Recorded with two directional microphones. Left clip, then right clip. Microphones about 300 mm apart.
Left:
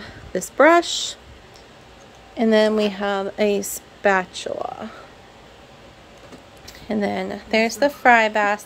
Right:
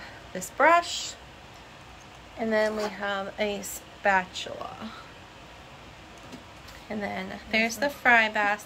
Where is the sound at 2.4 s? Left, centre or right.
Left.